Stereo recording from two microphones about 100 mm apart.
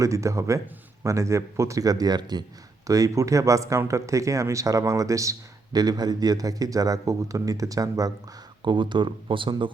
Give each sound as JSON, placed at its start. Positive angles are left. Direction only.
{"t": 0.0, "sound": "speech", "side_deg": -30}
{"t": 8.6, "sound": "speech", "side_deg": -50}